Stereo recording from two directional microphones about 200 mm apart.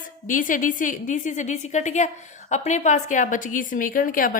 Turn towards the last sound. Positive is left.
turn(degrees=45)  # may be behind; listen again after turning